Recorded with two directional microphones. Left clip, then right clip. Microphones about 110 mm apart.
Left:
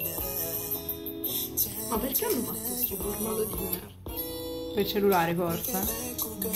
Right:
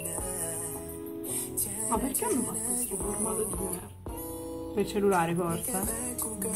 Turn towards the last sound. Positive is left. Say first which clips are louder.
# left 2 dB
turn(degrees=0)  # may be behind; listen again after turning